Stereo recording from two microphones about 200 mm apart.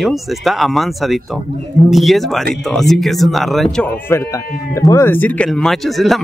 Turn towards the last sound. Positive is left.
turn(degrees=0)  # may be behind; listen again after turning